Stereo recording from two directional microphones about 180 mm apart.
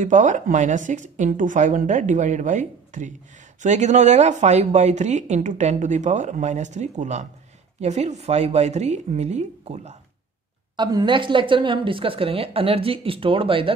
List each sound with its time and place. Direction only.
0.0 s a woman's voice: 45° right (ahead or behind)
10.8 s a woman's voice: 25° right (ahead or behind)